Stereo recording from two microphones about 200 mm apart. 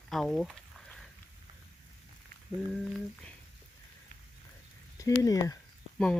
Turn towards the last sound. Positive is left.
turn(degrees=5)  # may be behind; listen again after turning